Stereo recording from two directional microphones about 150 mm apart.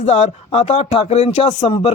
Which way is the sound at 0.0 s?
45° left (ahead or behind).